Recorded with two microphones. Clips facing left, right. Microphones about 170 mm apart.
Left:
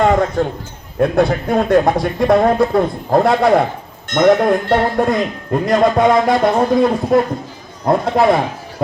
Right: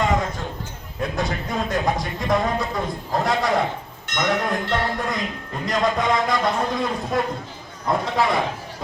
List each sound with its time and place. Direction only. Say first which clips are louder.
0.0 s a man's voice: left 9 dB; 60° left (ahead or behind)